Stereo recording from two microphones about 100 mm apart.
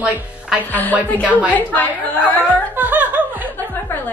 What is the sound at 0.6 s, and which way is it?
A woman's voice, 15° left (ahead or behind).